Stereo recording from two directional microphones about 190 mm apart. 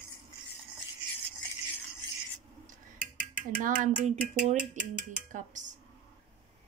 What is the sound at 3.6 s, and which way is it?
Speech, 45° right (ahead or behind).